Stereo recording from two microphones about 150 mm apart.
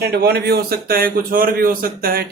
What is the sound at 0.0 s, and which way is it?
A man's voice, 90° right.